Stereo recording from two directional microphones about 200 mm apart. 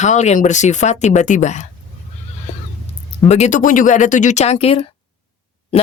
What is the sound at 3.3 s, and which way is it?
Speech, 35° left (ahead or behind).